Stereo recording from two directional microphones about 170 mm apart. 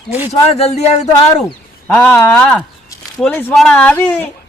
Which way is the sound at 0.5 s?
40° left (ahead or behind).